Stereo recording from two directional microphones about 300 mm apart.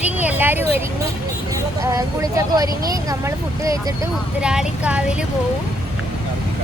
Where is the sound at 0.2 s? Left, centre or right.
Centre.